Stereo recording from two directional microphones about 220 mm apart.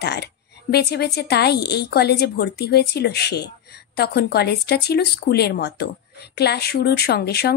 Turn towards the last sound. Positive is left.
turn(degrees=45)  # may be behind; listen again after turning